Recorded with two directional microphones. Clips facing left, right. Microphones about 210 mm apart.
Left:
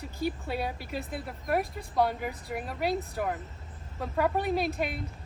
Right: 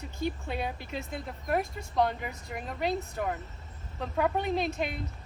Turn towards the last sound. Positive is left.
turn(degrees=5)  # may be behind; listen again after turning